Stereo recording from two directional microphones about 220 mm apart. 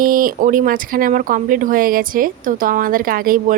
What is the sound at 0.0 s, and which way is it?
Speech, 40° right (ahead or behind).